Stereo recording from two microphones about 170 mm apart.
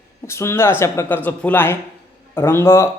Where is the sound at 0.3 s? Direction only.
15° left (ahead or behind).